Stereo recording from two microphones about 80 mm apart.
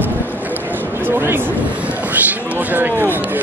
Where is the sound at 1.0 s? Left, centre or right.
Right.